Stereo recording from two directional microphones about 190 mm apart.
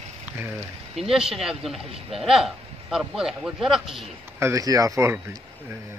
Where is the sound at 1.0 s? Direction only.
Centre (ahead or behind).